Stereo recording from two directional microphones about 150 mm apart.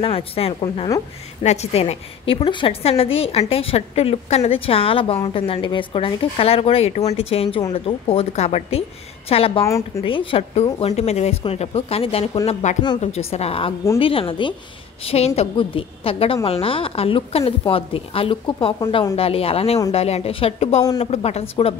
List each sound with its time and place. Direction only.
0.0 s a woman's voice: 40° left (ahead or behind)
9.7 s speech: 20° left (ahead or behind)
10.0 s speech: 40° left (ahead or behind)
12.6 s speech: 55° left (ahead or behind)
13.0 s a woman's voice: 45° left (ahead or behind)